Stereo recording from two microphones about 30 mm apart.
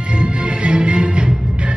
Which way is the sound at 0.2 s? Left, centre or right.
Right.